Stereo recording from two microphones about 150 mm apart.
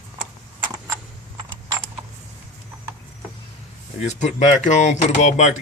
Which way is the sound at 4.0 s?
50° left (ahead or behind).